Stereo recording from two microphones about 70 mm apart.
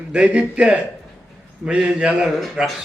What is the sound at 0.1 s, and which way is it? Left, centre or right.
Speech, centre.